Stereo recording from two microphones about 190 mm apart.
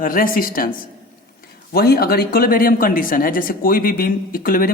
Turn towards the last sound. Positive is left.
turn(degrees=50)  # may be behind; listen again after turning